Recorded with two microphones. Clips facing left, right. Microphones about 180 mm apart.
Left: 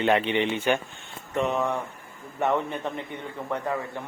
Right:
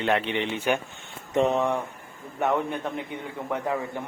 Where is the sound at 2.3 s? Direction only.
Centre (ahead or behind).